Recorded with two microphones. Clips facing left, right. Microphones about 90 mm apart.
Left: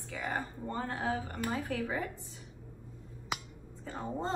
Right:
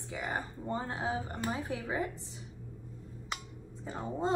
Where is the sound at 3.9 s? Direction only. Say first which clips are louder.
Right 1 dB; 15° right (ahead or behind).